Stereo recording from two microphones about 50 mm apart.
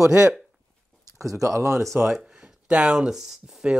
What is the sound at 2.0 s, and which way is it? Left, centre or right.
Speech, centre.